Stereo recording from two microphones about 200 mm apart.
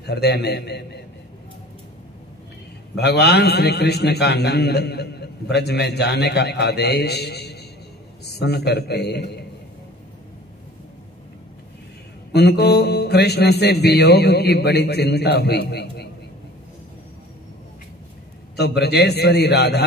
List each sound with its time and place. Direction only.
0.0 s a man's voice: 55° left (ahead or behind)
3.0 s a man's voice: 55° left (ahead or behind)
12.3 s a man's voice: 55° left (ahead or behind)
18.6 s a man's voice: 55° left (ahead or behind)